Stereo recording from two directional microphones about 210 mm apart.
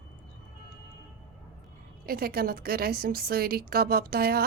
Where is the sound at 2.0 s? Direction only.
45° right (ahead or behind).